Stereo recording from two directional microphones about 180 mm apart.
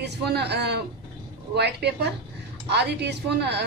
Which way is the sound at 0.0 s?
65° right (ahead or behind).